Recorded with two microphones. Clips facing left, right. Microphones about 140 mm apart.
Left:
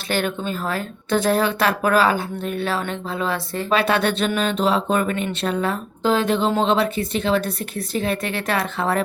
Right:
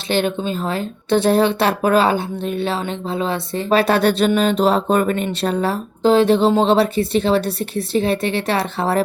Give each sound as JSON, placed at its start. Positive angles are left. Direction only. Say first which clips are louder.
{"t": 0.1, "sound": "speech", "louder": "right 4 dB", "side_deg": -20}
{"t": 3.7, "sound": "speech", "louder": "right 4 dB", "side_deg": -40}